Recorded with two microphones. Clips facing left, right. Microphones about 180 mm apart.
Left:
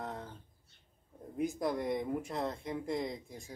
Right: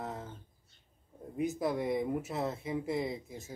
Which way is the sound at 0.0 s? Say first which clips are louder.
Right 1 dB; 5° right (ahead or behind).